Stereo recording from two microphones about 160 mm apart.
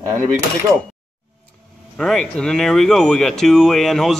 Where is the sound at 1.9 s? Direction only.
5° left (ahead or behind).